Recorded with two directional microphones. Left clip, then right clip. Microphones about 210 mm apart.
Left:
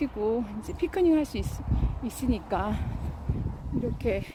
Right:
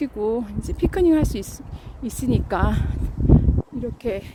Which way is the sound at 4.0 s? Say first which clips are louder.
Right 3 dB; 20° right (ahead or behind).